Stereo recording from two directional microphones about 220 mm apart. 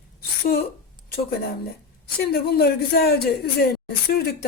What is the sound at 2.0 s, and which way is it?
Speech, 45° left (ahead or behind).